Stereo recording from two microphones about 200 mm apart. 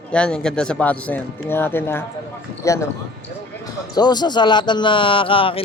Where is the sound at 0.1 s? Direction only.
5° left (ahead or behind).